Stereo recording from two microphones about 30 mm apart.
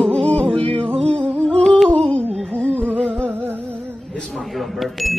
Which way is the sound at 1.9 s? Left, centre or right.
Left.